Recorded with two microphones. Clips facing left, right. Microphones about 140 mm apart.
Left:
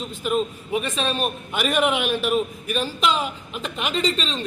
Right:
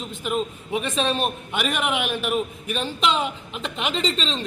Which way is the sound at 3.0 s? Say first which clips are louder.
Right 3 dB; 25° right (ahead or behind).